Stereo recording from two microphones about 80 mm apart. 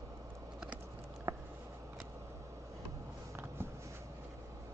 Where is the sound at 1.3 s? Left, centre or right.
Right.